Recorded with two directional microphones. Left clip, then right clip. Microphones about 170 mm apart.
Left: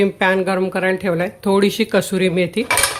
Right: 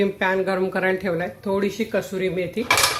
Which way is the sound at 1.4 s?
55° left (ahead or behind).